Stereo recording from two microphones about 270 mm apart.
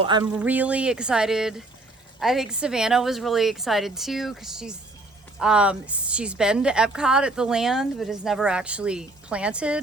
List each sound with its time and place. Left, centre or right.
0.0 s speech: centre
0.3 s a woman's voice: centre